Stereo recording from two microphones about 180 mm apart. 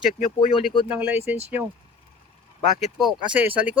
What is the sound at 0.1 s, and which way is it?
Speech, 45° left (ahead or behind).